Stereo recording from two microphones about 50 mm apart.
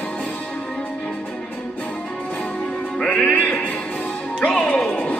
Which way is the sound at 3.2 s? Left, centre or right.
Left.